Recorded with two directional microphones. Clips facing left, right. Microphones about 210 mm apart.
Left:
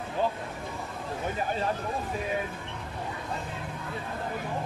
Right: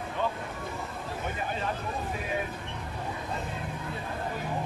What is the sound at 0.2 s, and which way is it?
Vehicle, 35° left (ahead or behind).